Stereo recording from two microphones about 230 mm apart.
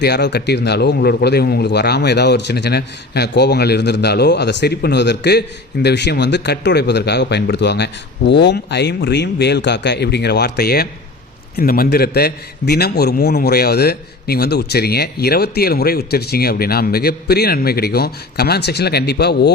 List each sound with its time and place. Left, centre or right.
0.0 s a man's voice: left